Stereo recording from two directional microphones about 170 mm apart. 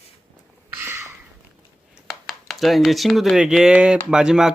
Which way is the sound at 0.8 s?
15° right (ahead or behind).